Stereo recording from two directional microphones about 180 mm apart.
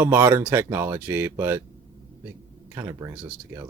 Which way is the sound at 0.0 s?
15° right (ahead or behind).